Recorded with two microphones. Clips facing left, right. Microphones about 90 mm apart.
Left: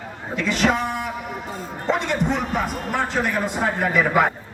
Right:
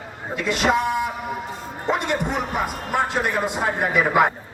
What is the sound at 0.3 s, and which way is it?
Speech, 10° right (ahead or behind).